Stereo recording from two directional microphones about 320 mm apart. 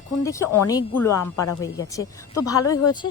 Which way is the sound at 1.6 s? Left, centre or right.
Centre.